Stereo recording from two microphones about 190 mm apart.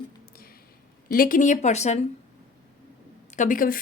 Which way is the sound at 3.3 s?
40° left (ahead or behind).